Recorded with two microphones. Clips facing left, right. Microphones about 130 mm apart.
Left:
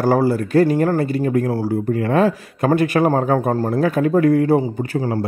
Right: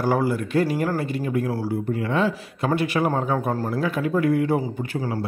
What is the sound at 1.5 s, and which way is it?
Speech, 30° left (ahead or behind).